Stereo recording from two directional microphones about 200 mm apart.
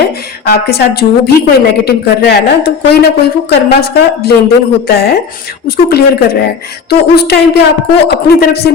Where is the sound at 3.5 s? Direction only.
55° left (ahead or behind).